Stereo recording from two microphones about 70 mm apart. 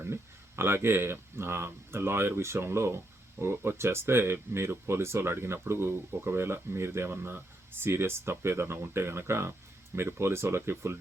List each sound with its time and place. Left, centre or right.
0.0 s speech: right